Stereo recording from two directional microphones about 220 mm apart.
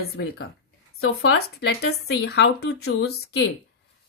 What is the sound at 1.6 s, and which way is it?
A woman's voice, 50° left (ahead or behind).